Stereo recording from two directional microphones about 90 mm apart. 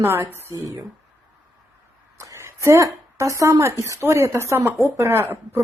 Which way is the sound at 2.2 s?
30° right (ahead or behind).